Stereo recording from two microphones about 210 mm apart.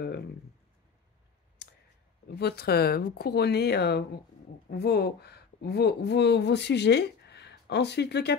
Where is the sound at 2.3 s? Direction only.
50° left (ahead or behind).